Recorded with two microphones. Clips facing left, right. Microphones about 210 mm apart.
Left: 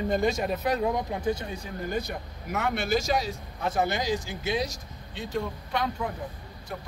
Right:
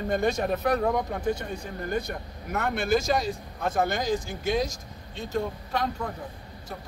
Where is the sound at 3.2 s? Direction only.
50° right (ahead or behind).